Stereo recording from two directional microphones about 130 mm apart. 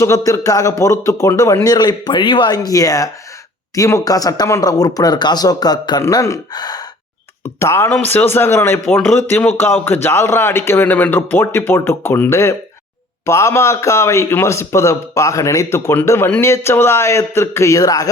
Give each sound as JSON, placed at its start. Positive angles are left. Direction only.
{"t": 0.0, "sound": "a man's voice", "side_deg": 25}
{"t": 7.6, "sound": "a man's voice", "side_deg": 20}